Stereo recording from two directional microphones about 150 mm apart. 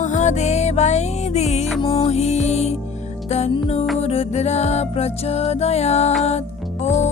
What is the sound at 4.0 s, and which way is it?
Music, 45° left (ahead or behind).